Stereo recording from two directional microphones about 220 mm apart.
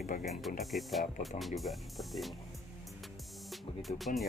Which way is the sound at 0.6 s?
Centre (ahead or behind).